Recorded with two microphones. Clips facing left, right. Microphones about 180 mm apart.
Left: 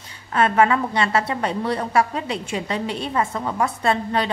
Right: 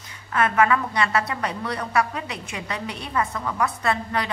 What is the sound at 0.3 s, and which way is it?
A woman's voice, 30° left (ahead or behind).